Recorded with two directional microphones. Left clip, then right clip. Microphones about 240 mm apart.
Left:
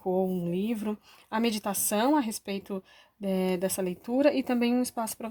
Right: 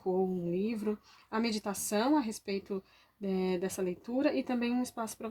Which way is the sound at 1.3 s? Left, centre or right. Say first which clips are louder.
Left 5 dB; left.